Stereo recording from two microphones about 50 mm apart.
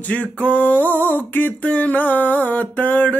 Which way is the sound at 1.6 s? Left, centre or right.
Left.